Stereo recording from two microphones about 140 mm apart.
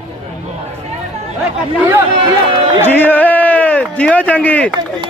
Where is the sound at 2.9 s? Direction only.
15° left (ahead or behind).